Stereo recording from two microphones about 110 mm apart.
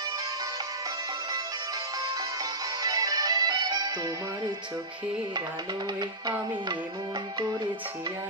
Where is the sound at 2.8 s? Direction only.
35° right (ahead or behind).